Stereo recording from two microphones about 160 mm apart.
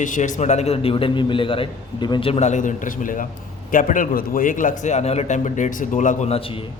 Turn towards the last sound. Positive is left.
turn(degrees=35)  # may be behind; listen again after turning